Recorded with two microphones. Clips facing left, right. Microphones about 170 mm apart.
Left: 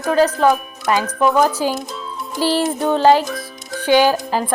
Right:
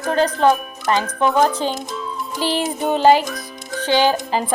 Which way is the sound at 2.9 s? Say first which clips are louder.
Even; 10° right (ahead or behind).